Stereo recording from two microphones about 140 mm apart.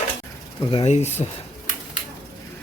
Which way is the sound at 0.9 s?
50° left (ahead or behind).